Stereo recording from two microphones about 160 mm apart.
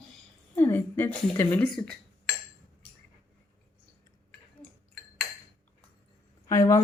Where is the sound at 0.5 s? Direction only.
15° left (ahead or behind).